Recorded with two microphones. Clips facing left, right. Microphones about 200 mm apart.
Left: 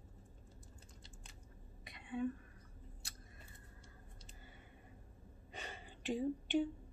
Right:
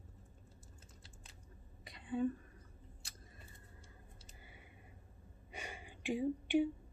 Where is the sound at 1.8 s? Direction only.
35° right (ahead or behind).